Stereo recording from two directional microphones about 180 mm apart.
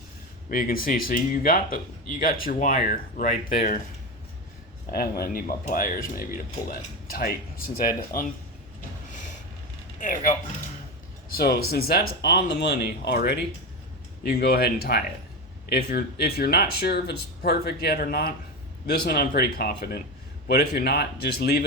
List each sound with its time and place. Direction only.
0.5 s speech: 50° left (ahead or behind)
4.9 s speech: 55° left (ahead or behind)
10.0 s speech: 45° left (ahead or behind)
11.3 s speech: 60° left (ahead or behind)